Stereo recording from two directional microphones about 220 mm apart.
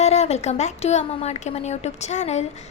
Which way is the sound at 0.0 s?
30° left (ahead or behind).